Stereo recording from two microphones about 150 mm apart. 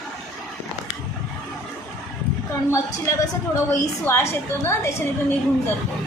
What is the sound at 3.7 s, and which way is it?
A woman's voice, 15° left (ahead or behind).